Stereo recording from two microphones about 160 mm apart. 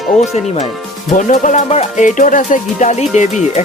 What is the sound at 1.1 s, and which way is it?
Speech, 50° left (ahead or behind).